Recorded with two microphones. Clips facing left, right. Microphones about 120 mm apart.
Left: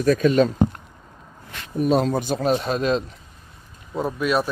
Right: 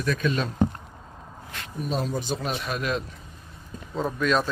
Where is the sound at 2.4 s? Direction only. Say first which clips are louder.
Left 8 dB; 35° left (ahead or behind).